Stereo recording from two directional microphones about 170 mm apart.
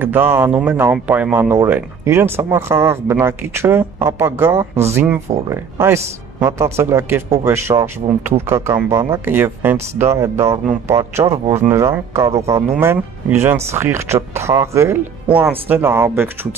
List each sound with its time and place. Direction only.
0.0 s speech: 10° right (ahead or behind)